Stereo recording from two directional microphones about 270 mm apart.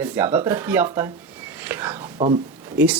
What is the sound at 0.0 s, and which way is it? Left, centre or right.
Speech, centre.